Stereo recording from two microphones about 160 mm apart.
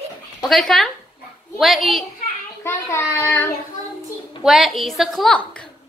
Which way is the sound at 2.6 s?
15° left (ahead or behind).